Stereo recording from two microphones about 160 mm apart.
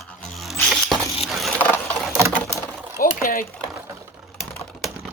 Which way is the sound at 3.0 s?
60° left (ahead or behind).